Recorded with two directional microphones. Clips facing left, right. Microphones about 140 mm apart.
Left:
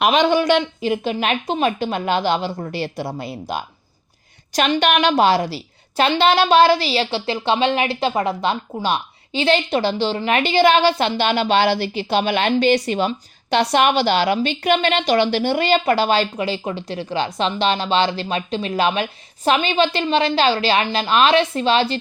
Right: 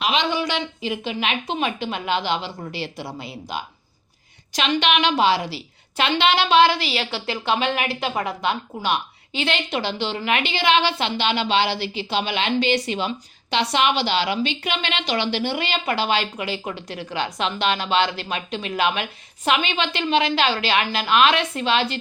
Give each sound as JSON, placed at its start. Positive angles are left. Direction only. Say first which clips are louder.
{"t": 0.0, "sound": "a woman's voice", "louder": "left 7 dB", "side_deg": 50}
{"t": 4.8, "sound": "a woman's voice", "louder": "left 3 dB", "side_deg": 45}